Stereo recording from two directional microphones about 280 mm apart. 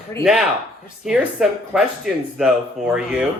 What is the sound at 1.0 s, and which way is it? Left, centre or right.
Speech, centre.